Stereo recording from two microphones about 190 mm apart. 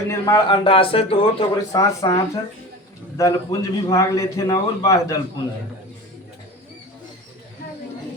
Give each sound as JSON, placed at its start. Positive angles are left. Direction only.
{"t": 0.1, "sound": "a man's voice", "side_deg": 20}
{"t": 1.7, "sound": "a man's voice", "side_deg": 15}